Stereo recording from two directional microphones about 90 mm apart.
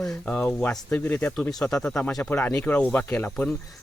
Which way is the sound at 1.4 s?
5° left (ahead or behind).